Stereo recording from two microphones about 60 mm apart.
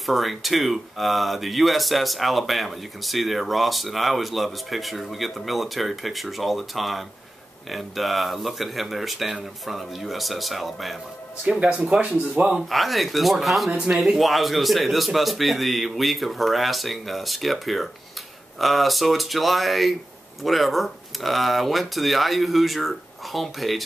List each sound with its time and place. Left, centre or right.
0.0 s speech: centre
11.4 s speech: centre
12.6 s speech: centre